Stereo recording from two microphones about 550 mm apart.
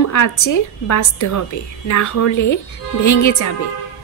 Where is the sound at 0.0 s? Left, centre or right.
Left.